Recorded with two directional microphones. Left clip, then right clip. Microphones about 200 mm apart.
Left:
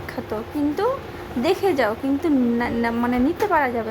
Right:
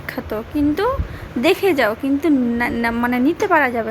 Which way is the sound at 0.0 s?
15° right (ahead or behind).